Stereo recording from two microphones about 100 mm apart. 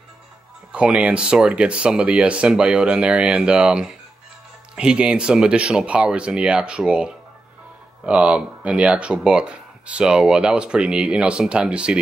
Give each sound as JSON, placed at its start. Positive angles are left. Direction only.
{"t": 0.7, "sound": "speech", "side_deg": -10}